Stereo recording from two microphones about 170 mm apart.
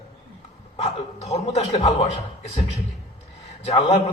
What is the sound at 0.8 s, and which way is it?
A man's voice, 40° left (ahead or behind).